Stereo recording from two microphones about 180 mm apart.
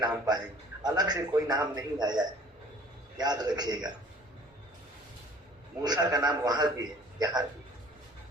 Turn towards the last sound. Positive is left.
turn(degrees=-20)  # may be behind; listen again after turning